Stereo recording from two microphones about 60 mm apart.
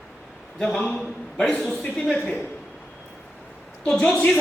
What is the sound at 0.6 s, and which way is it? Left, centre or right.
Speech, centre.